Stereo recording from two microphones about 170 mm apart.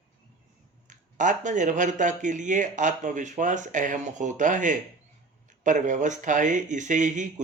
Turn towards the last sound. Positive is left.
turn(degrees=-45)  # may be behind; listen again after turning